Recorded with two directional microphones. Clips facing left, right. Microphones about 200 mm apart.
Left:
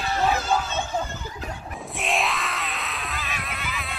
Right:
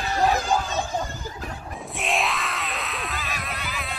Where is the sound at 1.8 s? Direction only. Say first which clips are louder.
Even; centre (ahead or behind).